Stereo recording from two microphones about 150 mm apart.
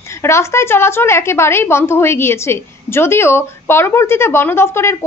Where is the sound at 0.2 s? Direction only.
20° left (ahead or behind).